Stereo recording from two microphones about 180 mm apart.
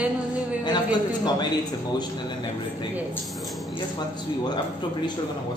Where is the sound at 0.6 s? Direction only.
25° left (ahead or behind).